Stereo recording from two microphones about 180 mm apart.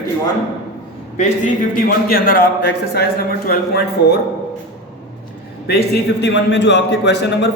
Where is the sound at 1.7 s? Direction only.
50° left (ahead or behind).